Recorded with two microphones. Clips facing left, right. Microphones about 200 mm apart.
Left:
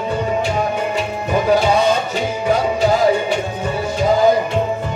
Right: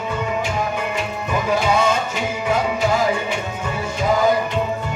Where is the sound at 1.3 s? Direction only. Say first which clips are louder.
Left 5 dB; 35° left (ahead or behind).